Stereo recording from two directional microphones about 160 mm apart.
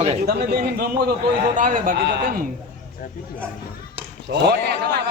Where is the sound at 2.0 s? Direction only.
90° right; by 2.5 s 65° right (ahead or behind).